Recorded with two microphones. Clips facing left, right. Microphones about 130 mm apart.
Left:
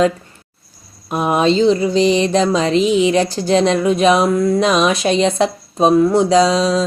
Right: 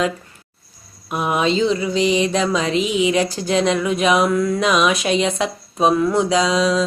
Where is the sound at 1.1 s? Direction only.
35° left (ahead or behind).